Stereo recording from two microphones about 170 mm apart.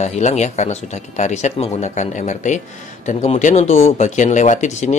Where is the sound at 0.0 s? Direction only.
40° left (ahead or behind).